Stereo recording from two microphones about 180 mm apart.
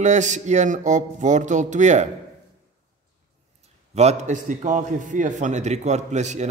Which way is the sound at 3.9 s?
40° right (ahead or behind).